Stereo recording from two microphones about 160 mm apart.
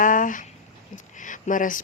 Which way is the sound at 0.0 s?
55° left (ahead or behind).